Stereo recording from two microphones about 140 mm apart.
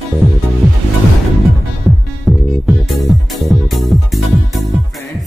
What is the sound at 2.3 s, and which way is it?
Music, centre (ahead or behind).